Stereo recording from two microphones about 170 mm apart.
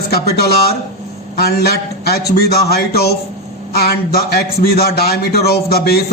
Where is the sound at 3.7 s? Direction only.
65° left (ahead or behind).